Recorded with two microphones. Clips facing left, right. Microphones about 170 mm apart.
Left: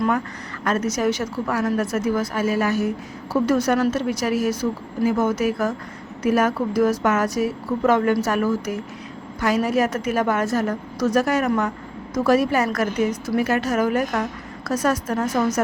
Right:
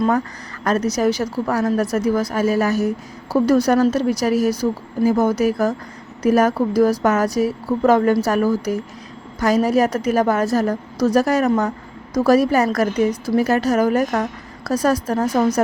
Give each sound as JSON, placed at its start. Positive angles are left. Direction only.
{"t": 0.6, "sound": "a woman's voice", "side_deg": -35}